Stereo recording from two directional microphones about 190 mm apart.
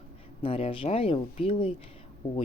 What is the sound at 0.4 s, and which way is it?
Speech, 30° left (ahead or behind).